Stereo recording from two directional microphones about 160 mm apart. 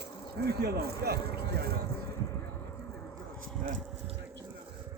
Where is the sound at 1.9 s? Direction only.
15° left (ahead or behind).